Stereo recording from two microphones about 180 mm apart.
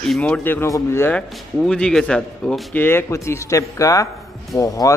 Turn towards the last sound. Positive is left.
turn(degrees=20)  # may be behind; listen again after turning